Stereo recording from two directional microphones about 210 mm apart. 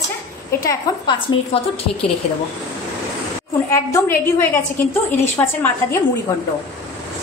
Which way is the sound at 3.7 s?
10° left (ahead or behind).